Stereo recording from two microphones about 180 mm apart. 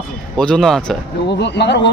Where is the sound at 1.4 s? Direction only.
70° left (ahead or behind).